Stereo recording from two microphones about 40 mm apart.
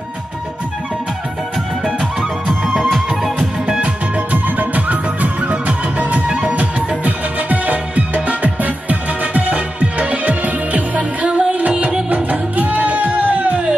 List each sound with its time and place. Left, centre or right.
2.7 s music: centre
3.8 s music: right